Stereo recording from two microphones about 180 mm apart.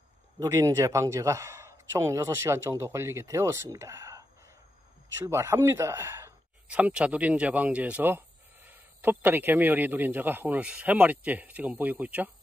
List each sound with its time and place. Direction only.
0.4 s a man's voice: 20° right (ahead or behind)